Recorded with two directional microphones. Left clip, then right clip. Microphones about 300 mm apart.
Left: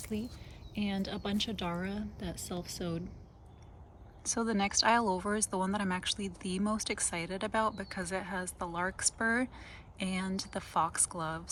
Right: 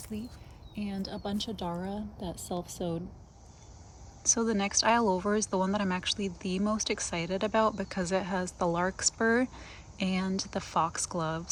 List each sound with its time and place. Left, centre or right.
0.1 s a woman's voice: centre
1.6 s a woman's voice: centre
4.2 s speech: centre